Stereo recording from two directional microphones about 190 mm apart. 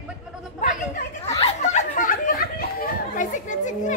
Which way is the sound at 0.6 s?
40° left (ahead or behind).